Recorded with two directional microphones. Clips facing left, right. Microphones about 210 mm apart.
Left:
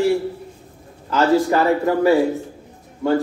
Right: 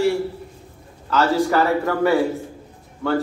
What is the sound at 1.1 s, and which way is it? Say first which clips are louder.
A man's voice: left 2 dB; 20° left (ahead or behind).